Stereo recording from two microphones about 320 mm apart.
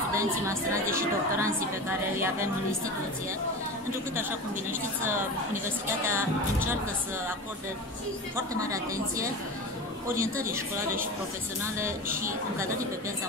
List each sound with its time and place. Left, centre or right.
0.1 s a woman's voice: centre
6.0 s a woman's voice: centre
8.5 s a woman's voice: centre